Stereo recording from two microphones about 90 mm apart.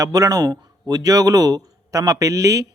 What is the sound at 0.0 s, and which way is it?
Speech, 40° right (ahead or behind).